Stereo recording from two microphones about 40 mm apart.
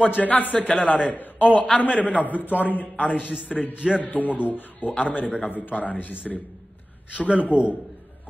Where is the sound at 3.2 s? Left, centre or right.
Right.